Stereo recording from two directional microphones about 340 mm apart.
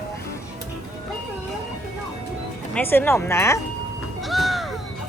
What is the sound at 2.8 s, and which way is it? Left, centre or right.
Speech, centre.